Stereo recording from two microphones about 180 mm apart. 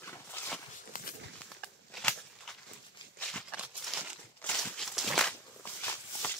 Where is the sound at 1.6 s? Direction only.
5° left (ahead or behind).